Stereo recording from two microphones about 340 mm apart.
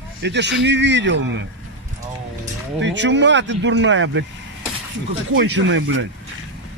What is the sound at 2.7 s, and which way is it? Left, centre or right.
A man's voice, right.